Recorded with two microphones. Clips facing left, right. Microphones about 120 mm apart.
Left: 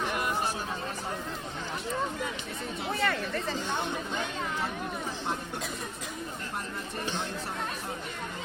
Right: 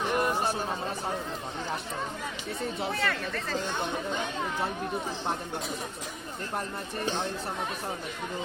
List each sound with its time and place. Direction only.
3.0 s speech: 10° left (ahead or behind)